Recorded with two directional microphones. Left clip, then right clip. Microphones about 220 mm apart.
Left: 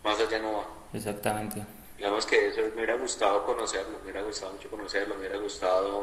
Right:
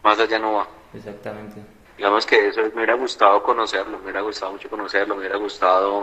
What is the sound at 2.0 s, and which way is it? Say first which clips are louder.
A man's voice: right 9 dB; 15° right (ahead or behind).